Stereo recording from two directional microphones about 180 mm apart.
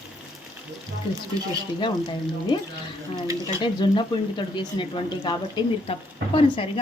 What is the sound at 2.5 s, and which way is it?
Speech, 25° left (ahead or behind).